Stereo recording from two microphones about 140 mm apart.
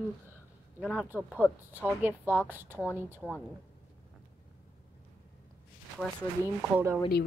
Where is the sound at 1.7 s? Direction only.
15° right (ahead or behind).